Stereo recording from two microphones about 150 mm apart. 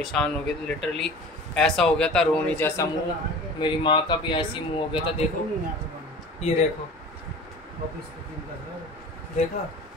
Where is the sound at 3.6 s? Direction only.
30° left (ahead or behind).